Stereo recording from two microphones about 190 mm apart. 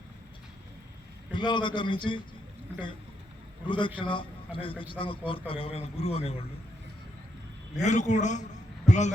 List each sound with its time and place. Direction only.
1.3 s a man's voice: 25° left (ahead or behind)
3.7 s a man's voice: 25° left (ahead or behind)
7.8 s a man's voice: 40° left (ahead or behind)